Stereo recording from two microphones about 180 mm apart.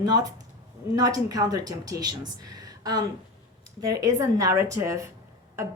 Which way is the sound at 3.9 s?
20° right (ahead or behind).